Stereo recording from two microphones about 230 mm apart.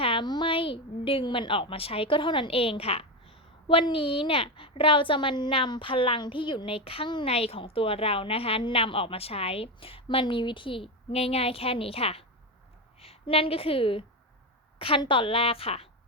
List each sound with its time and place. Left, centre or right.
0.0 s a woman's voice: left